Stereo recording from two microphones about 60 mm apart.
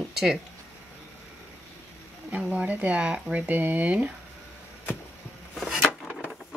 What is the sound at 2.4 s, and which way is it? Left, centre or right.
Speech, right.